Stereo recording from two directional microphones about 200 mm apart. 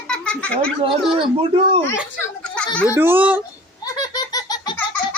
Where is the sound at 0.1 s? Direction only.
5° left (ahead or behind).